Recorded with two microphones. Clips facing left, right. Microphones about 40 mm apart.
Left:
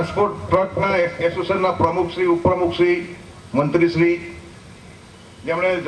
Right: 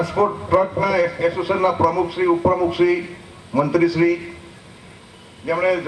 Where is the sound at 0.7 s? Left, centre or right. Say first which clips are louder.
Even; left.